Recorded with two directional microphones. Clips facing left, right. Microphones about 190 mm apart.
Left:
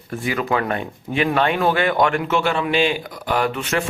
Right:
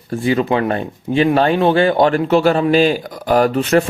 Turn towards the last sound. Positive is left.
turn(degrees=-35)  # may be behind; listen again after turning